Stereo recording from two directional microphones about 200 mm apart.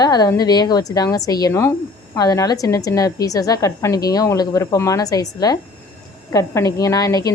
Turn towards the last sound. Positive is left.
turn(degrees=20)  # may be behind; listen again after turning